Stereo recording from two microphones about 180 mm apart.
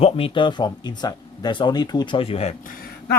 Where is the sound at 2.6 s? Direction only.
55° left (ahead or behind).